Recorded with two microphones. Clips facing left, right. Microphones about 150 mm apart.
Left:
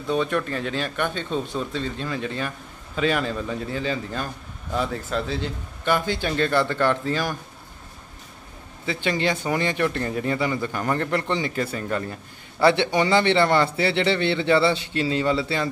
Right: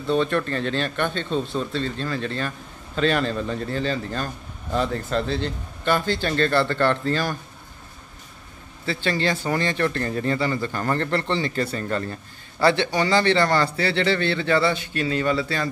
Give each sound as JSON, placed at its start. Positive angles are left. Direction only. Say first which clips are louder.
{"t": 0.0, "sound": "speech", "louder": "right 2 dB", "side_deg": 10}
{"t": 8.8, "sound": "speech", "louder": "even", "side_deg": 15}
{"t": 12.5, "sound": "a man's voice", "louder": "left 1 dB", "side_deg": 20}